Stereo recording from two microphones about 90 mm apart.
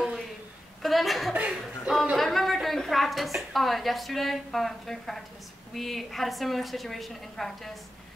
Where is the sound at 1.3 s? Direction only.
15° right (ahead or behind).